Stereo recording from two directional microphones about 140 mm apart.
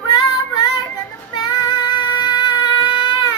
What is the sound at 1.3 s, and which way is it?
Music, 30° left (ahead or behind).